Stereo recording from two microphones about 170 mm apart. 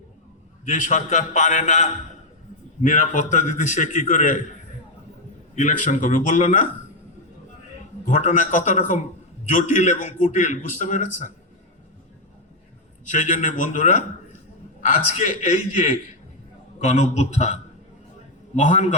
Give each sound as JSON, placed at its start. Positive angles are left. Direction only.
{"t": 0.6, "sound": "a man's voice", "side_deg": 50}
{"t": 5.5, "sound": "a man's voice", "side_deg": 50}
{"t": 8.0, "sound": "a man's voice", "side_deg": 50}
{"t": 13.1, "sound": "a man's voice", "side_deg": 50}